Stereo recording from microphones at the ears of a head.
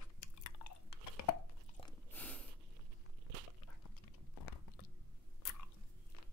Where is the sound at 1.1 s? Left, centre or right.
Left.